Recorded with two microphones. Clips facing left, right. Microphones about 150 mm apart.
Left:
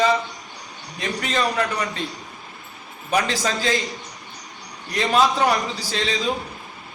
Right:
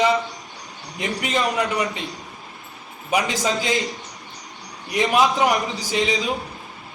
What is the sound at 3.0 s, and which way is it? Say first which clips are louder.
Speech: right 1 dB; 15° right (ahead or behind).